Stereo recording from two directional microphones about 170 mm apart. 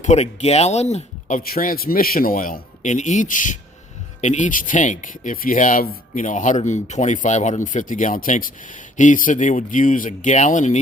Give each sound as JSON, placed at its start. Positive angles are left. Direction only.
{"t": 0.0, "sound": "speech", "side_deg": 45}
{"t": 1.4, "sound": "speech", "side_deg": 60}